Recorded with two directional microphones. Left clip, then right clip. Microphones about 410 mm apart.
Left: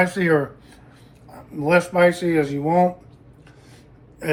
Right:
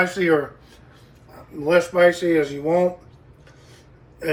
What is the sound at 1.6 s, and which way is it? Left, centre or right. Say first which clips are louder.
Speech: right 1 dB; centre.